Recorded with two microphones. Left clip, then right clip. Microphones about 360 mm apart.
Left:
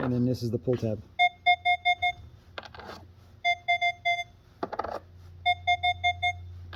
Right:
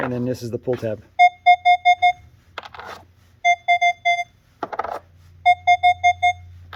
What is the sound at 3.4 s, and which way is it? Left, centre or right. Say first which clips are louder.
Music: right 9 dB; centre.